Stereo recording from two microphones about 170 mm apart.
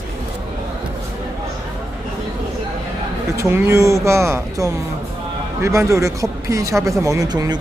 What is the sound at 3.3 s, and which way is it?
A man's voice, 15° right (ahead or behind).